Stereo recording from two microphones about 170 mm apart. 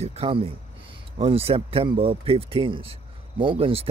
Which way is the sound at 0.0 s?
40° right (ahead or behind).